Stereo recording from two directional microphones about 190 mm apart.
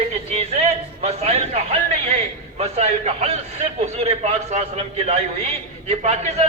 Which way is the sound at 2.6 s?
35° right (ahead or behind).